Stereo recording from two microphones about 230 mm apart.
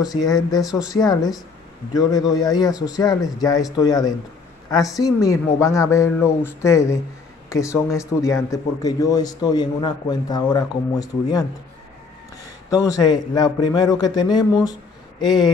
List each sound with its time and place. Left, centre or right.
0.0 s speech: centre
0.6 s speech: centre
0.9 s speech: centre
12.6 s speech: centre